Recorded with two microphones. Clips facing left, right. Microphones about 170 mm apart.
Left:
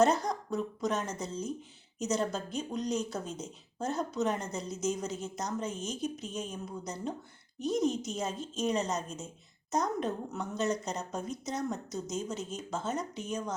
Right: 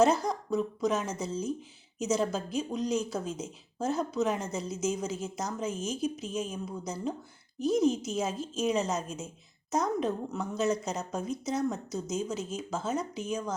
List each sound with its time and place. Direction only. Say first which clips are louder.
0.0 s speech: right 2 dB; centre (ahead or behind)